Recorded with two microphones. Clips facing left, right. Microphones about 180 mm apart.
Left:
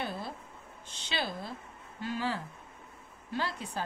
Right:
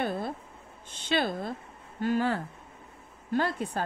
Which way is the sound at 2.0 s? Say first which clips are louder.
Right 7 dB; 50° right (ahead or behind).